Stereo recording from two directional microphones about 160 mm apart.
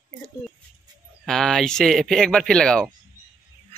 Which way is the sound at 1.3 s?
5° left (ahead or behind).